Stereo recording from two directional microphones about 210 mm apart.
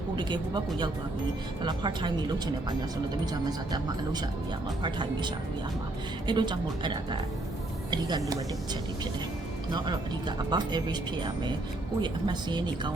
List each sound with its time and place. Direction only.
0.2 s speech: 20° right (ahead or behind)
4.8 s speech: 20° right (ahead or behind)
9.7 s speech: 20° right (ahead or behind)